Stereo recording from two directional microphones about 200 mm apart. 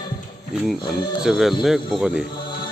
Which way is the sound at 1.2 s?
Centre (ahead or behind).